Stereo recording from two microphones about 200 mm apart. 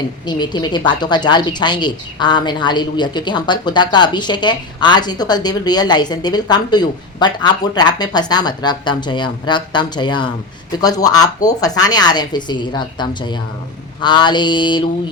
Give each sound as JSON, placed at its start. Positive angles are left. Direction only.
{"t": 0.3, "sound": "speech", "side_deg": 20}